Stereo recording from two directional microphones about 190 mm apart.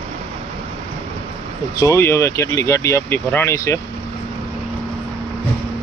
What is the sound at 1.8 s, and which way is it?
Speech, 15° left (ahead or behind).